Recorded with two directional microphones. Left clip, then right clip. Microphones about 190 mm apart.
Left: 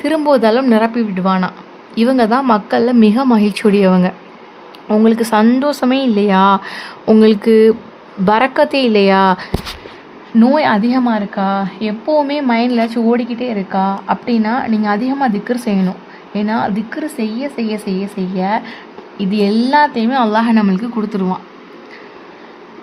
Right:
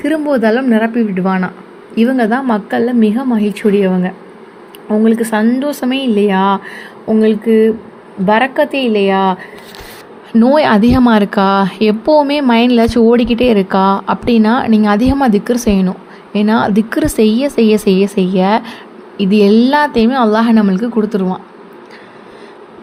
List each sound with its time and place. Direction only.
0.0 s a woman's voice: centre (ahead or behind)
7.1 s a sound: 20° left (ahead or behind)
8.3 s a woman's voice: 10° left (ahead or behind)
10.3 s a woman's voice: 15° right (ahead or behind)